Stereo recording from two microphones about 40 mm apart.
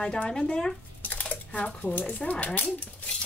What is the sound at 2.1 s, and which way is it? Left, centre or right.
Speech, left.